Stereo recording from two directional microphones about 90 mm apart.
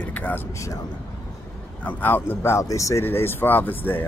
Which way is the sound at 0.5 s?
35° left (ahead or behind).